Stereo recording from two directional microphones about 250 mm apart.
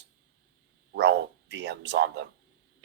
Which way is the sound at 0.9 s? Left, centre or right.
Right.